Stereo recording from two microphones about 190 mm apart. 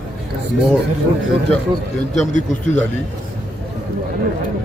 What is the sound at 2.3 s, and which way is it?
Speech, 40° left (ahead or behind).